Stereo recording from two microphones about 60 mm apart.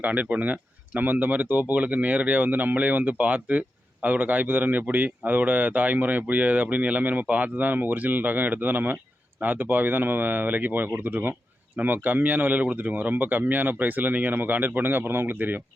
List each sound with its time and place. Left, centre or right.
0.0 s speech: right